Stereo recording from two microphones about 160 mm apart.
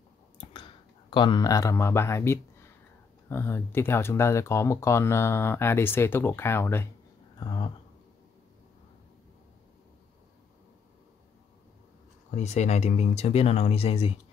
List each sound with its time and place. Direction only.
0.4 s clicking: 30° left (ahead or behind)
1.1 s speech: 30° left (ahead or behind)
7.3 s a sound: 30° left (ahead or behind)
12.4 s speech: 45° left (ahead or behind)